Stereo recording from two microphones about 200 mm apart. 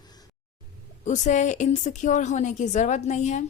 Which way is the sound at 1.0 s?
35° left (ahead or behind).